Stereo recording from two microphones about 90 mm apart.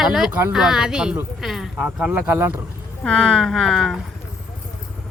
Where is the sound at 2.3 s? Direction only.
25° right (ahead or behind).